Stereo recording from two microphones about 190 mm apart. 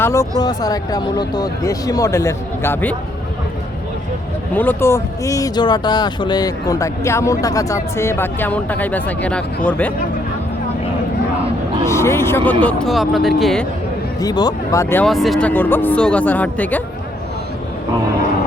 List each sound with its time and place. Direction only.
0.0 s speech: 15° left (ahead or behind)
4.5 s speech: 10° left (ahead or behind)
11.9 s speech: 15° left (ahead or behind)
14.2 s speech: 20° left (ahead or behind)
15.0 s speech: centre (ahead or behind)